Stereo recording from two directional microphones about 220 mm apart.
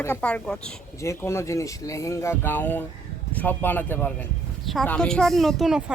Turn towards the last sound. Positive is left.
turn(degrees=-5)  # may be behind; listen again after turning